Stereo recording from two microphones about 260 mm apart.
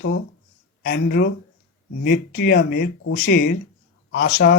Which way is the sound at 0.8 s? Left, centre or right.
Left.